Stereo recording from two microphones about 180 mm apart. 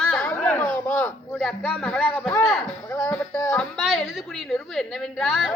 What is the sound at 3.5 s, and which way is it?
A woman's voice, centre (ahead or behind).